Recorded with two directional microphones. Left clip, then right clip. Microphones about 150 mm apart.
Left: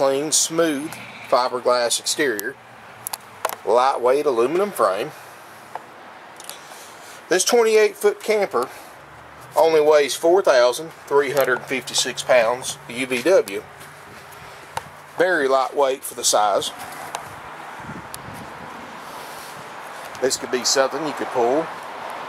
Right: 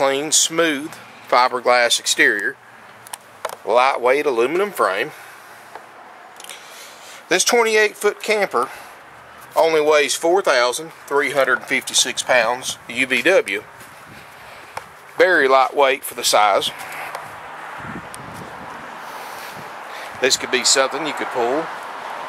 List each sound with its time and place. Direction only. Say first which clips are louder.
0.0 s speech: right 2 dB; 25° right (ahead or behind)
1.9 s speech: right 5 dB; centre (ahead or behind)
3.6 s speech: right 2 dB; centre (ahead or behind)
4.0 s speech: right 1 dB; 20° right (ahead or behind)
7.2 s speech: right 1 dB; 25° right (ahead or behind)
15.1 s speech: right 4 dB; 35° right (ahead or behind)
15.9 s speech: right 3 dB; 5° right (ahead or behind)
20.2 s speech: right 4 dB; 25° right (ahead or behind)